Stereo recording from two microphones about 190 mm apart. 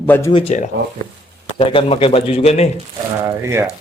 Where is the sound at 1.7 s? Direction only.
30° left (ahead or behind).